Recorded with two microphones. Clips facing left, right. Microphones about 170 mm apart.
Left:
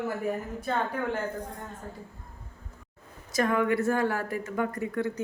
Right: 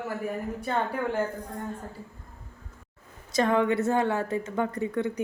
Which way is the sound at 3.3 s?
25° right (ahead or behind).